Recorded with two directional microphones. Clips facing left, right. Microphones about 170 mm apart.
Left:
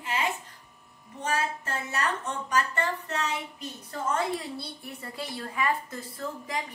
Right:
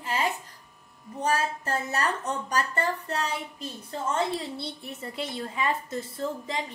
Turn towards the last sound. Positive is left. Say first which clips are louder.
# right 3 dB
turn(degrees=-25)  # may be behind; listen again after turning